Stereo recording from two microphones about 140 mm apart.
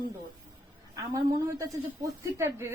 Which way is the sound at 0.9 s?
25° right (ahead or behind).